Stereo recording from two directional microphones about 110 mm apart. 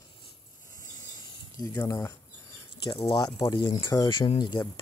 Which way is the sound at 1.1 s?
30° left (ahead or behind).